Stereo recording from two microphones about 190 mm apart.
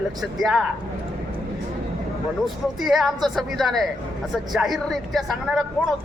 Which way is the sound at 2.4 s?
Centre (ahead or behind).